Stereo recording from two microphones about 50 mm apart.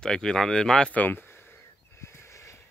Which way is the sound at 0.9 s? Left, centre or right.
Left.